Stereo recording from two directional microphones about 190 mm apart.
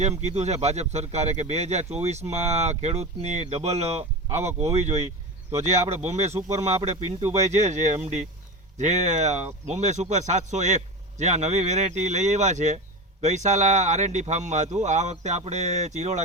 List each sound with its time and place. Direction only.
0.0 s speech: 35° right (ahead or behind)